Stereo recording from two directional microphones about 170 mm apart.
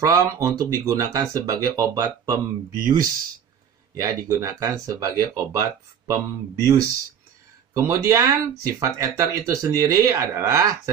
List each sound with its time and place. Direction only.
0.0 s speech: 20° right (ahead or behind)
7.7 s speech: 15° right (ahead or behind)